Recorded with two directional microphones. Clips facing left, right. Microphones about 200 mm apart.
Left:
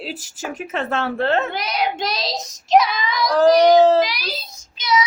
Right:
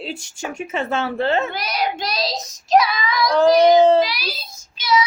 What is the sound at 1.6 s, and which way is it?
Speech, 20° left (ahead or behind).